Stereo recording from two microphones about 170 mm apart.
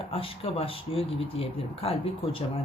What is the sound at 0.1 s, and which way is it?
Speech, 35° left (ahead or behind).